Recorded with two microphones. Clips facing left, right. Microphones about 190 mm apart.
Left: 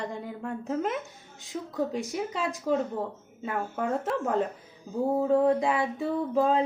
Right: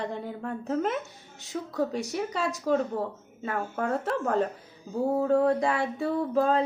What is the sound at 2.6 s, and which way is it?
Speech, centre (ahead or behind).